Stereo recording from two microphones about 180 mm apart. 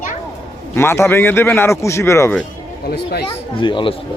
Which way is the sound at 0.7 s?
15° left (ahead or behind).